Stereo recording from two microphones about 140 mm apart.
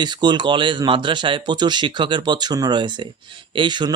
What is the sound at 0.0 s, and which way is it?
Speech, 30° right (ahead or behind).